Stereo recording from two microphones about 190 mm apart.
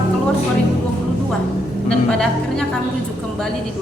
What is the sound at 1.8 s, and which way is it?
Speech, 5° left (ahead or behind).